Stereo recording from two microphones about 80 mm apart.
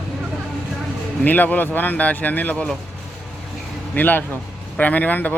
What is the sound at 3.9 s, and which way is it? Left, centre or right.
Speech, left.